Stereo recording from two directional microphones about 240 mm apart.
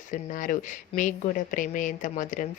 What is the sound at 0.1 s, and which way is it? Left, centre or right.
A woman's voice, left.